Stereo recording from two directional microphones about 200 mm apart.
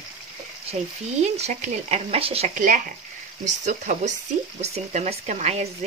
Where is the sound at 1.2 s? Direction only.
35° right (ahead or behind).